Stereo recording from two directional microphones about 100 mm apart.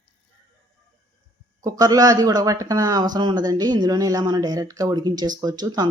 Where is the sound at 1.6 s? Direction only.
35° right (ahead or behind).